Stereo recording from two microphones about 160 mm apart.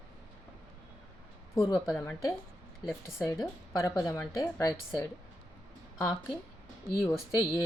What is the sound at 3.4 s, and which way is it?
Speech, 25° left (ahead or behind).